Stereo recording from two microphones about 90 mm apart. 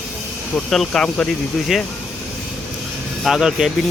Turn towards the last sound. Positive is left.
turn(degrees=-5)  # may be behind; listen again after turning